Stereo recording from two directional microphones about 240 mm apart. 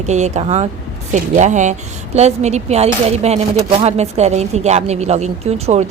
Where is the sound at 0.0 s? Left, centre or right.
Right.